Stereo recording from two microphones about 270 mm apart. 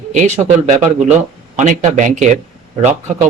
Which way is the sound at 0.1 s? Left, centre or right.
Right.